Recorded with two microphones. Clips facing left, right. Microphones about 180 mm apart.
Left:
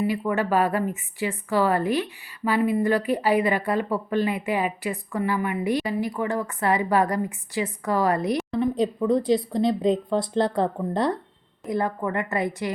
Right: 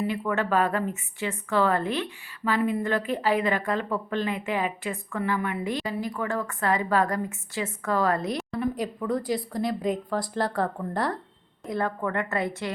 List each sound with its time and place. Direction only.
0.0 s a woman's voice: 10° left (ahead or behind)